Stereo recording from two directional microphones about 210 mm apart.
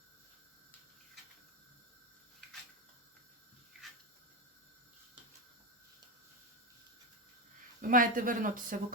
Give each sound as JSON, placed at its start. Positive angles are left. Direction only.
{"t": 7.8, "sound": "speech", "side_deg": -40}